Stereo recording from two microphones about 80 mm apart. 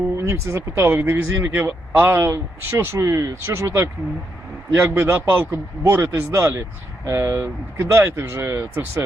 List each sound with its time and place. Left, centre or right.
0.2 s a man's voice: right